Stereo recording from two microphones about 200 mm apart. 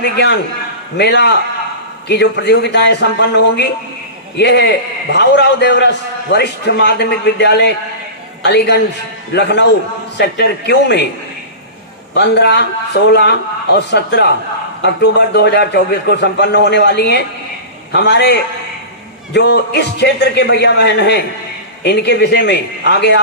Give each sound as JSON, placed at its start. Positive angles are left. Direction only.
{"t": 0.0, "sound": "a man's voice", "side_deg": 55}
{"t": 12.1, "sound": "a man's voice", "side_deg": 55}